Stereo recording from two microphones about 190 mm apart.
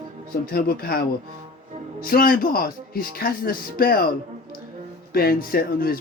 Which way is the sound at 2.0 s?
50° left (ahead or behind).